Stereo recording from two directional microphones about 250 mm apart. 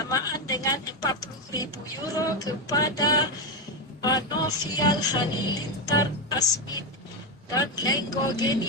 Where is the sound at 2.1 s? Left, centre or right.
Centre.